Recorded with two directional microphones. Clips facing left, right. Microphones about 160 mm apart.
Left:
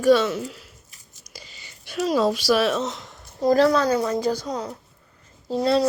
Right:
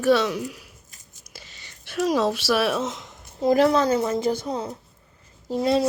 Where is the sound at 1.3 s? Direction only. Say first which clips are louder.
Left 2 dB; centre (ahead or behind).